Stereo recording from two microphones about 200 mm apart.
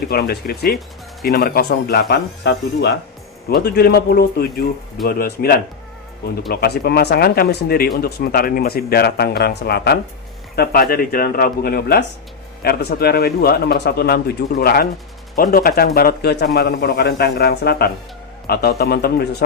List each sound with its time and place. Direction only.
0.1 s speech: 50° left (ahead or behind)